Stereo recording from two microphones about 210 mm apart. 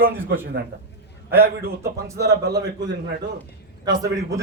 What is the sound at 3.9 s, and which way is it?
Speech, 20° right (ahead or behind).